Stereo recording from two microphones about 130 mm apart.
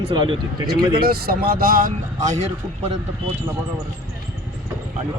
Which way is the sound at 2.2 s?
65° right (ahead or behind).